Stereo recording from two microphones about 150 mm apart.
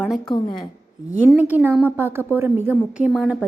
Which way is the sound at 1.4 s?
10° right (ahead or behind).